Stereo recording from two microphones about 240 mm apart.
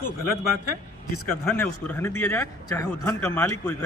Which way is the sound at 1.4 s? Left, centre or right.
Centre.